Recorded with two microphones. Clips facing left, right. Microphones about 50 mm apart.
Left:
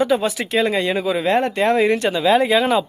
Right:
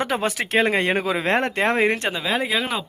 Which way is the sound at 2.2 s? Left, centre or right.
Centre.